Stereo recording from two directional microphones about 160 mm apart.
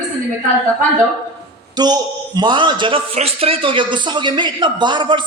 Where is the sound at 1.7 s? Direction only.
25° right (ahead or behind).